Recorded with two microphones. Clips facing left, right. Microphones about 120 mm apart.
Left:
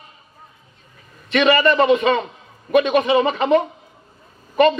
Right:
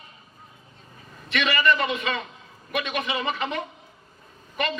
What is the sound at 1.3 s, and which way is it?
Speech, 35° left (ahead or behind).